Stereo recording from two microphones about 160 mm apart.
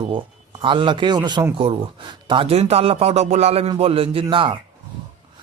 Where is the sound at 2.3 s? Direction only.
35° right (ahead or behind).